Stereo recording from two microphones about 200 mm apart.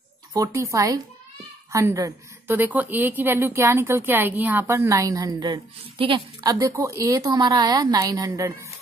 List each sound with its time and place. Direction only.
0.3 s a woman's voice: 15° right (ahead or behind)